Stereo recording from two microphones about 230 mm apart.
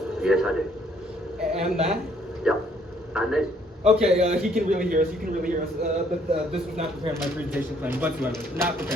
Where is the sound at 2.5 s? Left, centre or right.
Centre.